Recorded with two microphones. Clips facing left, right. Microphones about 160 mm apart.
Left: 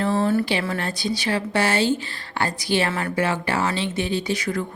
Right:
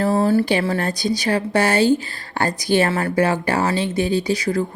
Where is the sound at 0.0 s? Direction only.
30° right (ahead or behind).